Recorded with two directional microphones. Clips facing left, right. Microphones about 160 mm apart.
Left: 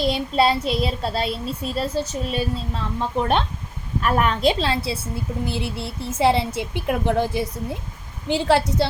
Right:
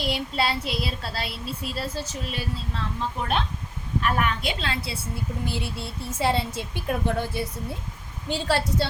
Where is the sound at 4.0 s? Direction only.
35° left (ahead or behind); by 7.4 s 15° left (ahead or behind).